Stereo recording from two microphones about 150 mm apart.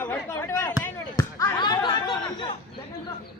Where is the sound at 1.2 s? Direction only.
20° left (ahead or behind).